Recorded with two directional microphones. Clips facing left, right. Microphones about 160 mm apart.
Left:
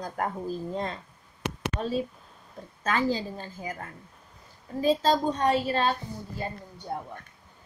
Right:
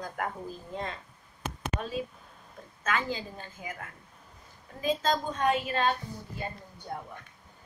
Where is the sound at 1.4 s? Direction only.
75° left (ahead or behind).